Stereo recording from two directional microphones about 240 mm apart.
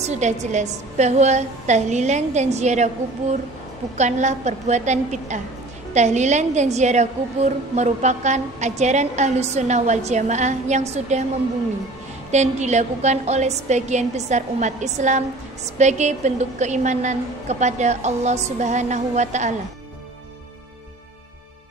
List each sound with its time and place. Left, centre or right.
0.0 s a woman's voice: right
4.0 s a woman's voice: right
12.3 s a woman's voice: right